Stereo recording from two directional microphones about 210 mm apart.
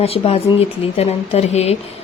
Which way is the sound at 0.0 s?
30° left (ahead or behind).